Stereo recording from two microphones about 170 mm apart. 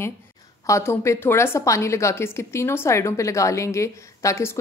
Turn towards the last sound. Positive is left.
turn(degrees=15)  # may be behind; listen again after turning